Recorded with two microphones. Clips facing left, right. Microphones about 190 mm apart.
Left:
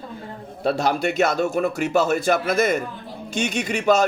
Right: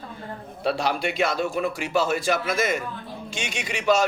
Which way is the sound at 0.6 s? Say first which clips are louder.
Left 3 dB; 45° left (ahead or behind).